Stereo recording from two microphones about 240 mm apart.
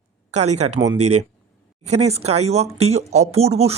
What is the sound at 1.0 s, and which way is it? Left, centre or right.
Speech, right.